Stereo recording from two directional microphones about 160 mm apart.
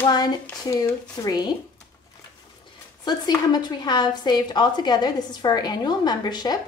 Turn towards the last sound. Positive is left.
turn(degrees=25)  # may be behind; listen again after turning